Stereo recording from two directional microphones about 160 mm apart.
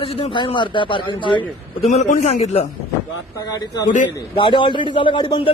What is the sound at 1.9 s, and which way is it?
Speech, 45° left (ahead or behind).